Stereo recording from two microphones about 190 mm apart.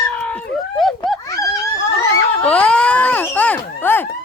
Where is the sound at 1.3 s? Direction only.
20° left (ahead or behind).